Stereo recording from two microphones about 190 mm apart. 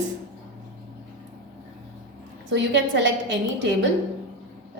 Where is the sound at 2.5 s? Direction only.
75° right (ahead or behind).